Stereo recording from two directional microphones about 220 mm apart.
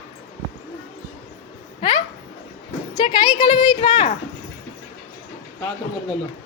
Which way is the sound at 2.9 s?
20° left (ahead or behind).